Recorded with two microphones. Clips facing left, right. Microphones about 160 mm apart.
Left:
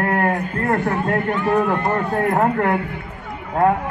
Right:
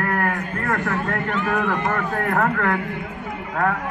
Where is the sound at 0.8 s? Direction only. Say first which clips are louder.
Left 4 dB; 20° left (ahead or behind).